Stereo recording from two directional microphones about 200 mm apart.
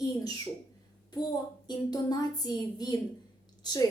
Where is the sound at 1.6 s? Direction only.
20° left (ahead or behind).